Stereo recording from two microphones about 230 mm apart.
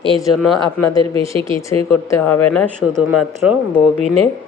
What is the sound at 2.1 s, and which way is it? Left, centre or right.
Speech, centre.